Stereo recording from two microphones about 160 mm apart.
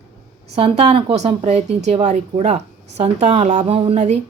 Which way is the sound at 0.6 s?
40° right (ahead or behind).